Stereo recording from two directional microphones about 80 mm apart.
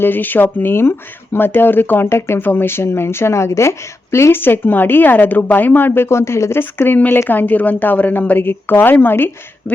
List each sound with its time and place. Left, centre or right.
0.0 s speech: left